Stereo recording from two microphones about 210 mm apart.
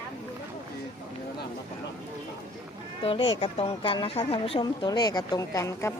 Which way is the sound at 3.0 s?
25° left (ahead or behind).